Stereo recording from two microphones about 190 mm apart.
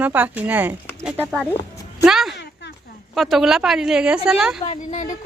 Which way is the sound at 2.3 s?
70° left (ahead or behind).